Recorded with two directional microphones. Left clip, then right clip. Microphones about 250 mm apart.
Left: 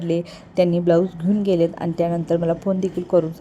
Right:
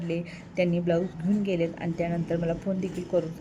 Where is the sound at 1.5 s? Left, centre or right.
Left.